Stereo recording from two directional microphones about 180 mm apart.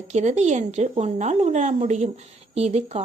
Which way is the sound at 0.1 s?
40° right (ahead or behind).